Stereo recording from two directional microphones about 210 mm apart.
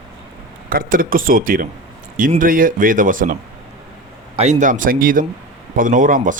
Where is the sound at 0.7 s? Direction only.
40° right (ahead or behind).